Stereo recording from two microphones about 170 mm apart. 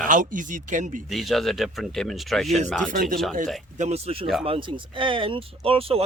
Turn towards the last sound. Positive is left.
turn(degrees=-35)  # may be behind; listen again after turning